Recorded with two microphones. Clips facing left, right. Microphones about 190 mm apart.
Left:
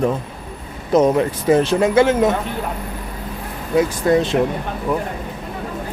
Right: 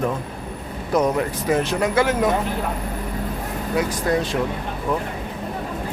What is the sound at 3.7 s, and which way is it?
Speech, 25° left (ahead or behind).